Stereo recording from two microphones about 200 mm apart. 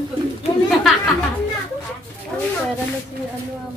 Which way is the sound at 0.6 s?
Centre (ahead or behind).